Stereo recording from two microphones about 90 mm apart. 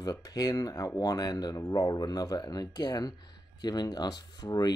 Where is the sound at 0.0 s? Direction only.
45° left (ahead or behind).